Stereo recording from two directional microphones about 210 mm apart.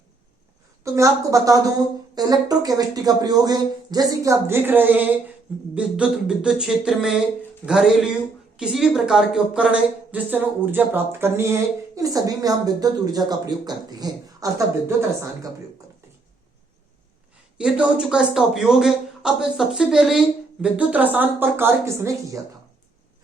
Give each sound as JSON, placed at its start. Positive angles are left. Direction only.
{"t": 0.9, "sound": "a woman's voice", "side_deg": -15}
{"t": 17.6, "sound": "speech", "side_deg": -5}